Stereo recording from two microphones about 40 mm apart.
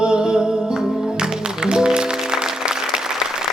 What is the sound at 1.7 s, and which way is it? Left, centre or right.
Music, centre.